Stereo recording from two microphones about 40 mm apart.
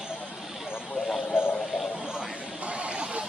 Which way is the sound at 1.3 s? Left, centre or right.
Left.